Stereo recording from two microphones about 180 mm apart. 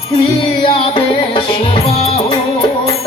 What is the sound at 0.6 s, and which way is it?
Music, 30° left (ahead or behind).